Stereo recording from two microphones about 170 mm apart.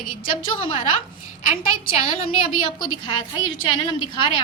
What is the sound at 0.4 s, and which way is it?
A woman's voice, 30° left (ahead or behind).